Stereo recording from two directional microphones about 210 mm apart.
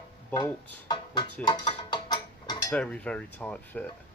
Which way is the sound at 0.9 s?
20° left (ahead or behind).